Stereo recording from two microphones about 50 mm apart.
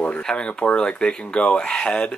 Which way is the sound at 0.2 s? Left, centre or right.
Centre.